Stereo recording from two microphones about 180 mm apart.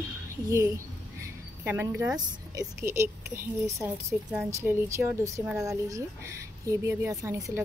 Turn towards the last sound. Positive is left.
turn(degrees=-15)  # may be behind; listen again after turning